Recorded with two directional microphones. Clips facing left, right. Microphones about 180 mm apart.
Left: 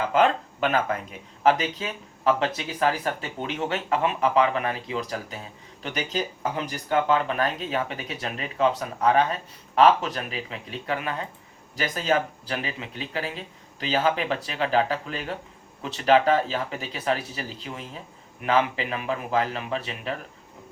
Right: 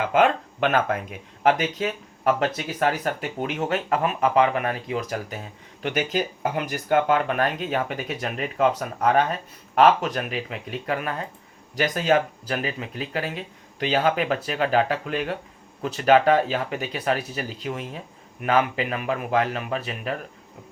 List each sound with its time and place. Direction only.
0.0 s speech: 50° right (ahead or behind)
15.8 s speech: 40° right (ahead or behind)